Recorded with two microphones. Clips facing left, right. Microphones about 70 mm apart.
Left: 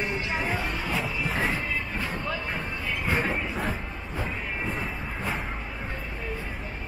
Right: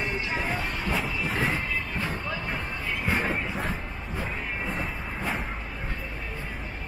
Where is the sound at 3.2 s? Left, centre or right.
Centre.